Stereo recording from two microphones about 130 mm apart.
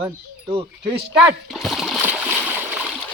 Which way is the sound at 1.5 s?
Centre (ahead or behind).